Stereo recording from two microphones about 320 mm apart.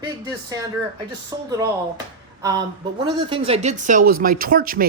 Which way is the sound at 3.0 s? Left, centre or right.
Centre.